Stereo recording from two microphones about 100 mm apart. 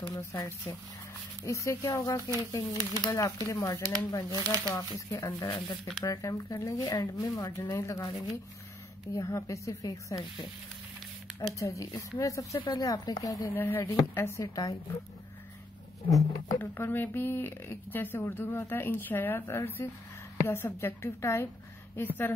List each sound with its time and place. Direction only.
0.0 s speech: 30° left (ahead or behind)
9.1 s speech: 35° left (ahead or behind)
11.6 s speech: 30° left (ahead or behind)
13.5 s speech: 20° left (ahead or behind)
14.5 s speech: 35° left (ahead or behind)
16.1 s speech: 35° left (ahead or behind)
16.5 s speech: 20° left (ahead or behind)